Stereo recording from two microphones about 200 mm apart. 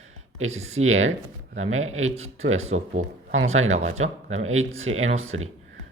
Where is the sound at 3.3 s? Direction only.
85° right.